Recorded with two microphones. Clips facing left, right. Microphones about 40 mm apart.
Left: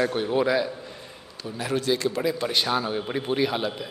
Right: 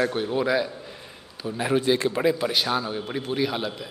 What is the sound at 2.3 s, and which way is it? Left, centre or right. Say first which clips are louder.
Speech: even; centre.